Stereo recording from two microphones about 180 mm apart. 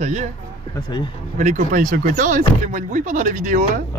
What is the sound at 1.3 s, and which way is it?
Speech, 45° right (ahead or behind).